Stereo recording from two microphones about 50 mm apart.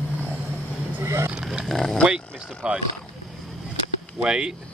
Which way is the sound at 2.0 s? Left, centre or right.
Right.